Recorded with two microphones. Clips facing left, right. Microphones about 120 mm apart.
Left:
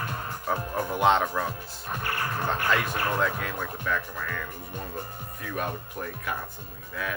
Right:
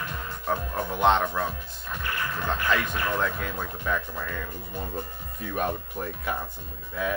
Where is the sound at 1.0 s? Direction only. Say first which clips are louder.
Right 1 dB; 5° left (ahead or behind).